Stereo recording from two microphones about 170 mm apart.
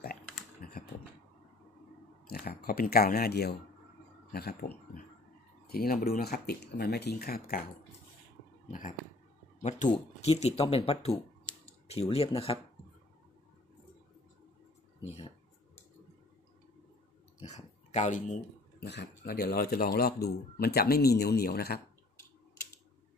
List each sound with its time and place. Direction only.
0.6 s typing: 60° left (ahead or behind)
2.2 s speech: 65° left (ahead or behind)
8.6 s a sound: 45° left (ahead or behind)
9.6 s speech: 45° left (ahead or behind)
15.0 s a sound: 35° left (ahead or behind)
17.4 s dog: 45° left (ahead or behind)
18.8 s speech: 80° left